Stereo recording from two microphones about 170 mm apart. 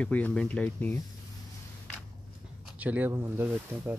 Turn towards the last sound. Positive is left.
turn(degrees=-10)  # may be behind; listen again after turning